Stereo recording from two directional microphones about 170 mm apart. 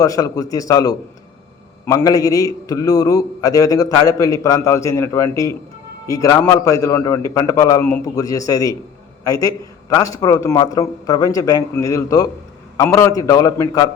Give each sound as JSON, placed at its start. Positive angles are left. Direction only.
{"t": 0.0, "sound": "a man's voice", "side_deg": 20}